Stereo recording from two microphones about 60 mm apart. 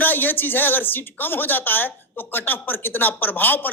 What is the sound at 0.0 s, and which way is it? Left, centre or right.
Speech, left.